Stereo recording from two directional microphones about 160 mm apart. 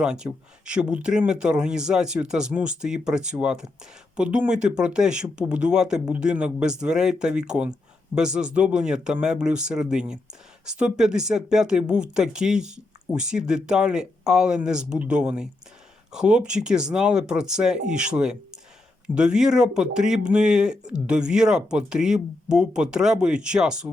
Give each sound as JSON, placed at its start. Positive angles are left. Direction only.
{"t": 0.0, "sound": "speech", "side_deg": -5}